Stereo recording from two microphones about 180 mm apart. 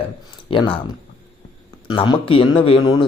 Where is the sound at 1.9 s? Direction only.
30° left (ahead or behind).